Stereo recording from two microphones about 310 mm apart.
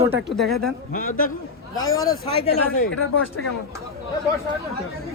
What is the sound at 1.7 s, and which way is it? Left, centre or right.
Speech, centre.